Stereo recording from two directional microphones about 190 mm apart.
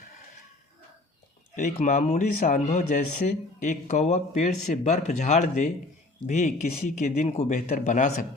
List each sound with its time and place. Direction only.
1.5 s speech: 40° left (ahead or behind)